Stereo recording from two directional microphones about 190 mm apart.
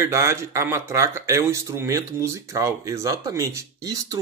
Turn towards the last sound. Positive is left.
turn(degrees=-15)  # may be behind; listen again after turning